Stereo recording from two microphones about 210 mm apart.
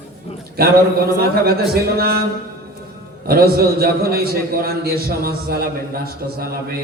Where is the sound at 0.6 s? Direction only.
45° right (ahead or behind).